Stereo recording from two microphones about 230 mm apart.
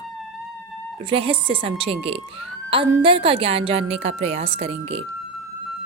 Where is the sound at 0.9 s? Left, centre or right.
Right.